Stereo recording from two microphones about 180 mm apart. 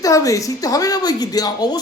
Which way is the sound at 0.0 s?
20° left (ahead or behind).